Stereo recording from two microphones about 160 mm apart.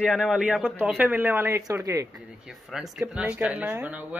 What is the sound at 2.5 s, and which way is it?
Speech, centre (ahead or behind).